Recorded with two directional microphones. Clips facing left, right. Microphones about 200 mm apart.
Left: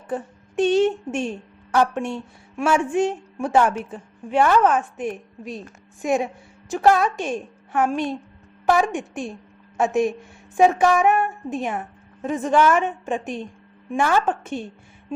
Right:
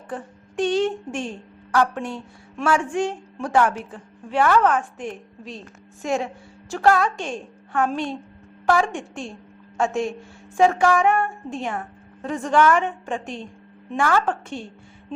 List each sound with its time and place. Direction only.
0.1 s a woman's voice: 25° left (ahead or behind)